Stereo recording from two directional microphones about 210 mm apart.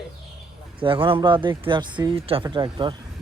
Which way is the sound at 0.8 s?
25° right (ahead or behind).